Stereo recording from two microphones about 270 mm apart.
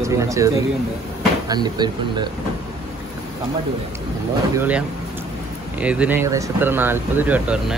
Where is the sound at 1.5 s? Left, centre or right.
Centre.